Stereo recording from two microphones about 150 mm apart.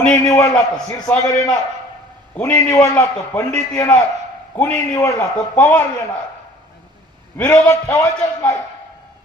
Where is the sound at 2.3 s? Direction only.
15° left (ahead or behind).